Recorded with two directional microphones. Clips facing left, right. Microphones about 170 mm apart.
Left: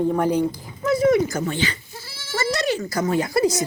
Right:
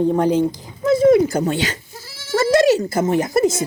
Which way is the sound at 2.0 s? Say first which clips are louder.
Right 8 dB; 45° right (ahead or behind).